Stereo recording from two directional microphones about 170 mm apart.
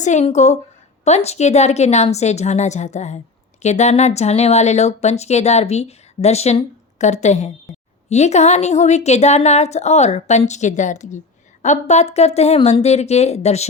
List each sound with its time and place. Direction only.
0.0 s a woman's voice: 40° left (ahead or behind)